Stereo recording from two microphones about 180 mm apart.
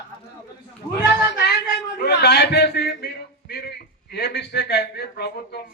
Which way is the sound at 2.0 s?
60° left (ahead or behind).